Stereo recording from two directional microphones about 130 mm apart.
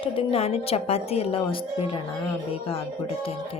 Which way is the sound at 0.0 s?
45° left (ahead or behind).